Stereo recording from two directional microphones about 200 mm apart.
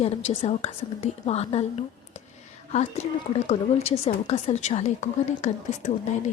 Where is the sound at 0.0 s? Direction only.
30° left (ahead or behind).